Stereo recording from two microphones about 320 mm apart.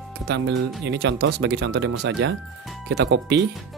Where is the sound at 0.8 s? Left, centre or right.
Right.